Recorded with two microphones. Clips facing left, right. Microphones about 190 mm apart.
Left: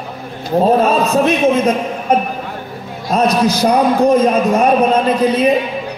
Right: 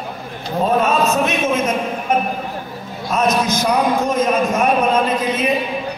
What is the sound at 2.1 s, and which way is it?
A man's voice, 35° left (ahead or behind).